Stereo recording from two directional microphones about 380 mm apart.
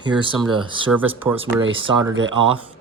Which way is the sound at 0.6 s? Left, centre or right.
Centre.